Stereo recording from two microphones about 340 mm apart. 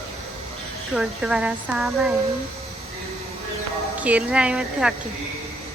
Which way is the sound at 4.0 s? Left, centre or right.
Centre.